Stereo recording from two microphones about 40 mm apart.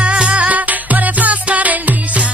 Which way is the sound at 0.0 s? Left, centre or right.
Right.